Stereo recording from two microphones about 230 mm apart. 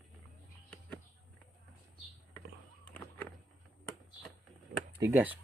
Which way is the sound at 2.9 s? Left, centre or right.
Centre.